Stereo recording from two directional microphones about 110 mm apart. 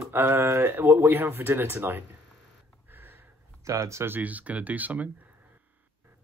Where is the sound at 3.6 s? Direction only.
25° right (ahead or behind).